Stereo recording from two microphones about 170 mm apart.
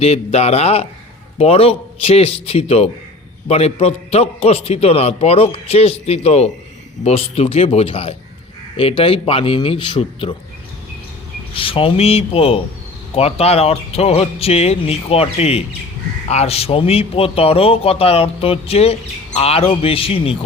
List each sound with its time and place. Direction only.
0.0 s a man's voice: 35° left (ahead or behind)
11.5 s a man's voice: 30° left (ahead or behind)